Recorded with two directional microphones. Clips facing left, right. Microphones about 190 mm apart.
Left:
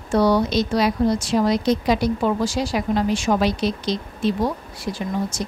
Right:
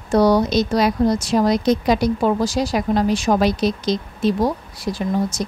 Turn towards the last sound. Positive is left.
turn(degrees=-40)  # may be behind; listen again after turning